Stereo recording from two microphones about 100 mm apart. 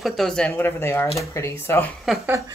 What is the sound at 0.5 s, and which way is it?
Speech, 20° left (ahead or behind).